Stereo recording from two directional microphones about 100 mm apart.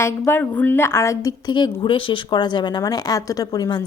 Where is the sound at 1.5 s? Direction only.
50° left (ahead or behind).